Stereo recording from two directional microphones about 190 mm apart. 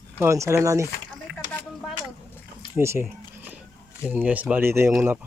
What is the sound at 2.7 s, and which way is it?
Speech, 10° right (ahead or behind).